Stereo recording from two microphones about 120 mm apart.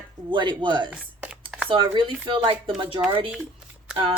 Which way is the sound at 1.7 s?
45° right (ahead or behind).